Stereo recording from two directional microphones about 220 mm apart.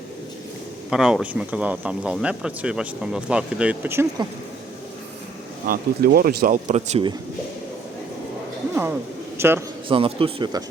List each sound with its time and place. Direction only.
0.9 s speech: 5° right (ahead or behind)
5.6 s speech: 40° right (ahead or behind)
9.4 s a man's voice: 10° right (ahead or behind)
9.9 s speech: 25° right (ahead or behind)